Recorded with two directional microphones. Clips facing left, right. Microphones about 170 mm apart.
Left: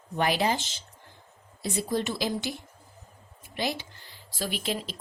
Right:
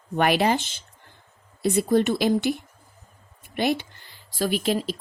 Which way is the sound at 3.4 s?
60° right (ahead or behind).